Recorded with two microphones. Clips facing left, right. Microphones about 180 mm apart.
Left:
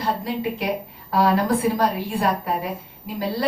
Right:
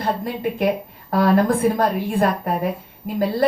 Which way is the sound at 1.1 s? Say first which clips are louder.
Right 2 dB; 50° right (ahead or behind).